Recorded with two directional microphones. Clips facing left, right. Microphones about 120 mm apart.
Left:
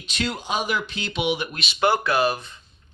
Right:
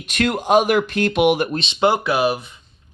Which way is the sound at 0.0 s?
55° right (ahead or behind).